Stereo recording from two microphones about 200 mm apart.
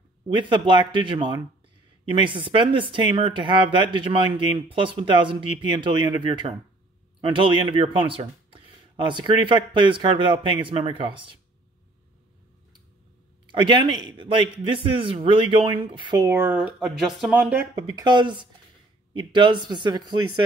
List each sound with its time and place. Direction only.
0.4 s speech: 25° right (ahead or behind)
13.5 s speech: 25° right (ahead or behind)
18.0 s speech: 20° right (ahead or behind)